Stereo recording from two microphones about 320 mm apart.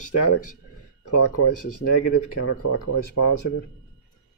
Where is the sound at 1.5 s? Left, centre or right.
Left.